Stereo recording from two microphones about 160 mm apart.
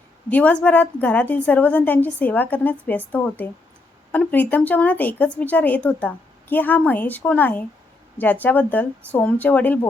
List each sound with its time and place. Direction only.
0.3 s speech: 10° left (ahead or behind)